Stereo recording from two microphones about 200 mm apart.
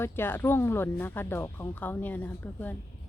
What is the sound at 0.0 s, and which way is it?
A woman's voice, 10° left (ahead or behind).